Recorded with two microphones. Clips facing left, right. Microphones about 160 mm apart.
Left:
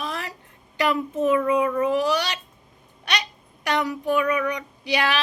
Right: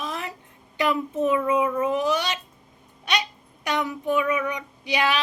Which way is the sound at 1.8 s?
20° right (ahead or behind).